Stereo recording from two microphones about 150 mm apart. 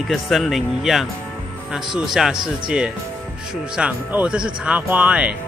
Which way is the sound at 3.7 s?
10° right (ahead or behind).